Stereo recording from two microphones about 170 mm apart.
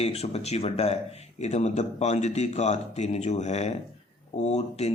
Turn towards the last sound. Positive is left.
turn(degrees=40)  # may be behind; listen again after turning